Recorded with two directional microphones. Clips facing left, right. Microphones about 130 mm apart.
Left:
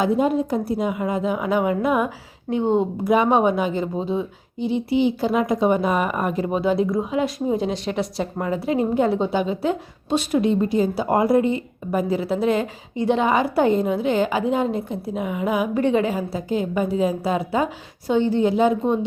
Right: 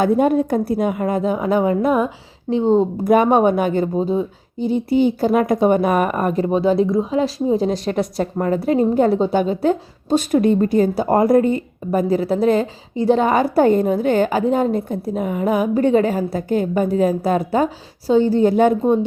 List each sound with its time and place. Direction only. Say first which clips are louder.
0.0 s a woman's voice: right 4 dB; 55° right (ahead or behind); by 2.6 s 30° right (ahead or behind)
2.7 s a woman's voice: right 4 dB; 45° right (ahead or behind)
3.9 s a woman's voice: right 5 dB; 40° right (ahead or behind)